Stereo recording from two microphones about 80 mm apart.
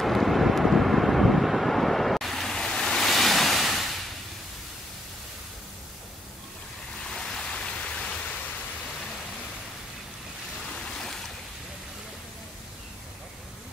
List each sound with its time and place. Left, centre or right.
0.0 s vehicle: centre
7.1 s a sound: centre
10.7 s waves: centre